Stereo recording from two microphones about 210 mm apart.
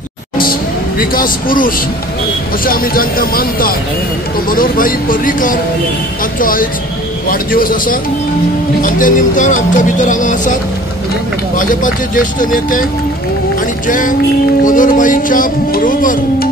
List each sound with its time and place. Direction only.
0.4 s vehicle: 45° left (ahead or behind)
2.6 s speech: 45° left (ahead or behind)
13.8 s speech: 40° left (ahead or behind)